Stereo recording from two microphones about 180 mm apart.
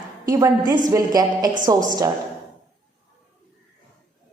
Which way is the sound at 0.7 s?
20° right (ahead or behind).